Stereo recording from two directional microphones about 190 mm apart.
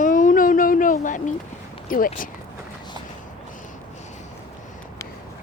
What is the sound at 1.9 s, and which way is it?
Speech, 45° left (ahead or behind).